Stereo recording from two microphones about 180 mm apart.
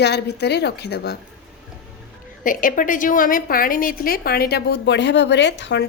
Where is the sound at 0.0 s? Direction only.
70° left (ahead or behind).